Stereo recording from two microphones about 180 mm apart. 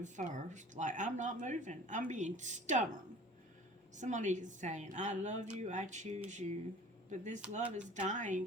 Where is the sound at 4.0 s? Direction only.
45° right (ahead or behind).